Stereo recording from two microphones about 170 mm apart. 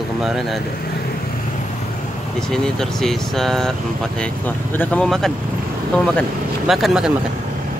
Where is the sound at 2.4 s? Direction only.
5° left (ahead or behind).